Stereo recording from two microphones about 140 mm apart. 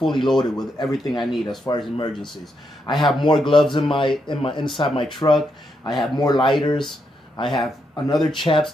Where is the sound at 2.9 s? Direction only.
35° left (ahead or behind).